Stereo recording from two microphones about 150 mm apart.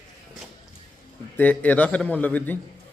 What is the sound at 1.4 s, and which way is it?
A man's voice, 10° left (ahead or behind).